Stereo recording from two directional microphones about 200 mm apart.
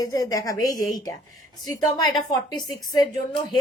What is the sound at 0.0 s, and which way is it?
A woman's voice, 20° left (ahead or behind).